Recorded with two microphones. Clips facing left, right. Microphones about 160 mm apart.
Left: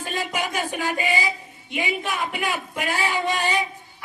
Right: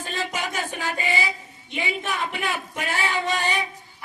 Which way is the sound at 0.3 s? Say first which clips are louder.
Left 3 dB; 15° left (ahead or behind).